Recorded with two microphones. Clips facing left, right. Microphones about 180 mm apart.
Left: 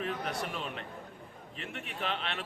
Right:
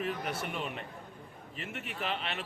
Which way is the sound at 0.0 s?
5° right (ahead or behind).